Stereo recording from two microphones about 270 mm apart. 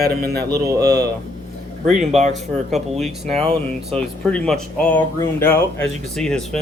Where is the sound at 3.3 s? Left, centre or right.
Right.